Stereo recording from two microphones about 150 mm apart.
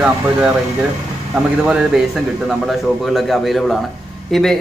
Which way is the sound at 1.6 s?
5° right (ahead or behind).